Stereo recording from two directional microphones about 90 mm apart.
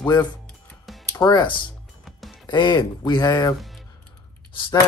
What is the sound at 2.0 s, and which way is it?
Music, centre (ahead or behind).